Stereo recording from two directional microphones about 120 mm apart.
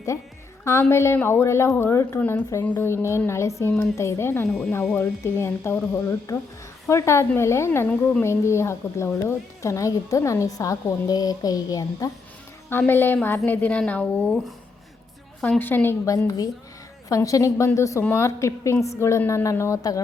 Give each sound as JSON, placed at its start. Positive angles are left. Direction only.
{"t": 0.6, "sound": "a woman's voice", "side_deg": 25}
{"t": 4.4, "sound": "speech", "side_deg": 5}
{"t": 4.9, "sound": "a woman's voice", "side_deg": 20}
{"t": 12.9, "sound": "a woman's voice", "side_deg": 20}
{"t": 15.4, "sound": "a woman's voice", "side_deg": 10}